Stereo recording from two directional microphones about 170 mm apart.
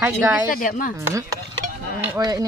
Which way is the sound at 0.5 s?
55° left (ahead or behind).